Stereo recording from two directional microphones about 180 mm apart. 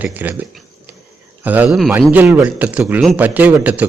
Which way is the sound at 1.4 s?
10° right (ahead or behind).